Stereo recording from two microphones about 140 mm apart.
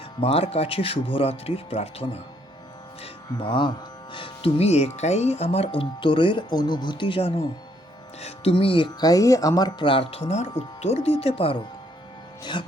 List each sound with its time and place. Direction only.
0.2 s speech: 45° left (ahead or behind)